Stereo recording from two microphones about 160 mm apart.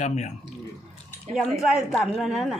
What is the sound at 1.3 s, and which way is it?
Speech, centre (ahead or behind).